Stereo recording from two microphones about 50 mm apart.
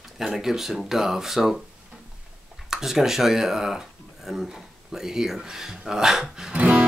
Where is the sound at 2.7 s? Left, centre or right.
Centre.